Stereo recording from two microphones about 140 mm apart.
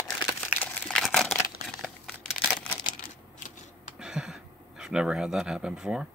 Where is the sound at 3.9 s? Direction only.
5° right (ahead or behind).